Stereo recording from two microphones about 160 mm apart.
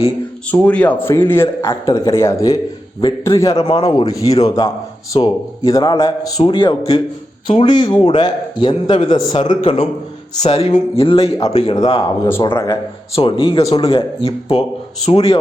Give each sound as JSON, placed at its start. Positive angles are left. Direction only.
{"t": 0.5, "sound": "a man's voice", "side_deg": 10}
{"t": 3.6, "sound": "a man's voice", "side_deg": 35}
{"t": 3.8, "sound": "a man's voice", "side_deg": 25}